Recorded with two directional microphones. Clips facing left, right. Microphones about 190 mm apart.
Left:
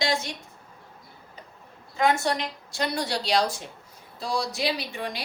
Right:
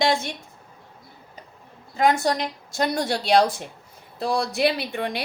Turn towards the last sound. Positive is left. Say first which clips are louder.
# right 4 dB
turn(degrees=-60)  # may be behind; listen again after turning